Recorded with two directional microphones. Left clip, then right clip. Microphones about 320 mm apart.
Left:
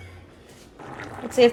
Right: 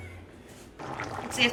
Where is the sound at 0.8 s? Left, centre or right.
Centre.